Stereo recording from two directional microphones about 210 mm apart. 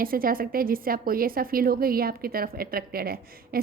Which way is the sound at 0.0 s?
45° right (ahead or behind).